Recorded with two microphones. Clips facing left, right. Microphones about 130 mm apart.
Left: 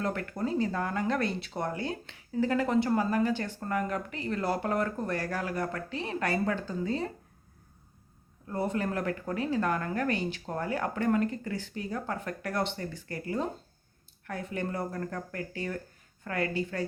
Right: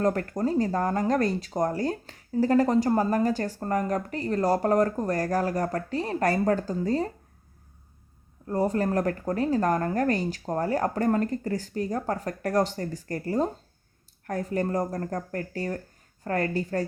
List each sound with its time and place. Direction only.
0.0 s speech: 40° right (ahead or behind)
8.4 s speech: 40° right (ahead or behind)